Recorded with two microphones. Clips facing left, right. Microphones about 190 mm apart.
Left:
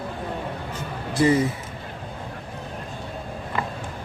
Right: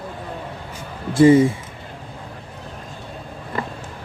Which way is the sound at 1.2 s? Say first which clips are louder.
Right 8 dB; 25° right (ahead or behind).